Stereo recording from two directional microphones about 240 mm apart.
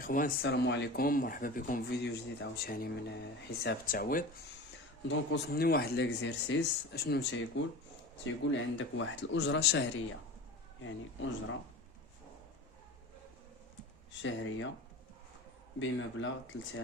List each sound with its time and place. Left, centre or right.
0.0 s speech: left
14.1 s speech: left
15.8 s speech: left